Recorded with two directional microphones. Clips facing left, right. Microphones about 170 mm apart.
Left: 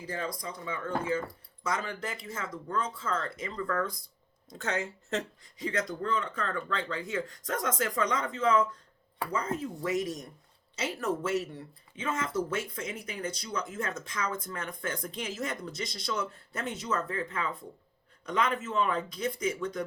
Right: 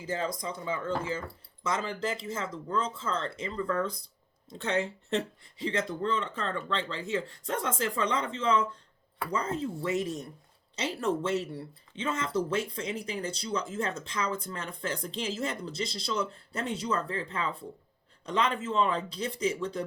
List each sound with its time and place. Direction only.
0.1 s speech: 25° right (ahead or behind)